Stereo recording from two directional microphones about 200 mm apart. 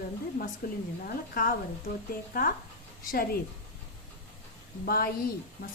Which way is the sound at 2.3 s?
45° left (ahead or behind).